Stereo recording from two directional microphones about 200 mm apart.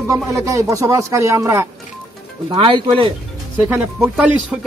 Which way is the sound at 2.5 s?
25° right (ahead or behind).